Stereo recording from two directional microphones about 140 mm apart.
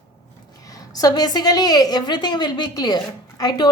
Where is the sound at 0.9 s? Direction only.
25° left (ahead or behind).